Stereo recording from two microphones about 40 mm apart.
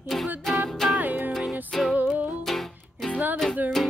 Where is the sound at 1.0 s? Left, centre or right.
Right.